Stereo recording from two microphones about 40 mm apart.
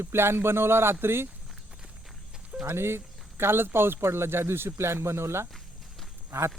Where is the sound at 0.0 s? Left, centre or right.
Right.